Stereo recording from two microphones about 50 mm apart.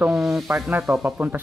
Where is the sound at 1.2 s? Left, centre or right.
Right.